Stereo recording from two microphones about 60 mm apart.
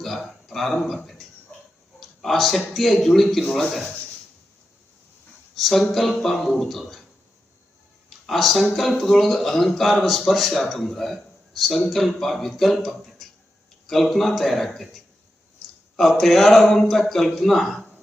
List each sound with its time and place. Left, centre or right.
0.0 s a sound: centre
0.4 s a man's voice: centre
5.5 s speech: centre
8.3 s speech: centre